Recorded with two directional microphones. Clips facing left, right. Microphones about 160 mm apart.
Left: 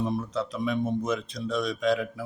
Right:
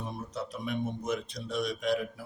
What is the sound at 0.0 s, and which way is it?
A man's voice, 90° left.